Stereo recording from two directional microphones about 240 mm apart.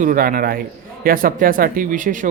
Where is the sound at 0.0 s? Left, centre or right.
Right.